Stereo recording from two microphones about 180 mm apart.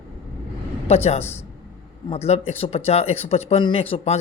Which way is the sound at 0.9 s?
35° left (ahead or behind).